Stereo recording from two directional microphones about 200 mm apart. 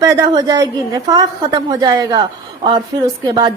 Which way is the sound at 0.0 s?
20° right (ahead or behind).